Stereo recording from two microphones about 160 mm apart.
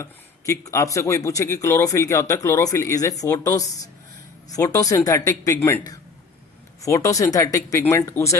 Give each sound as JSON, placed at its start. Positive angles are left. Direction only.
{"t": 0.0, "sound": "speech", "side_deg": 20}
{"t": 6.8, "sound": "speech", "side_deg": 20}